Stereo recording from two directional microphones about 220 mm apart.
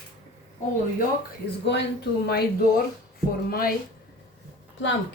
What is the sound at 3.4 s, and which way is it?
Speech, 45° left (ahead or behind).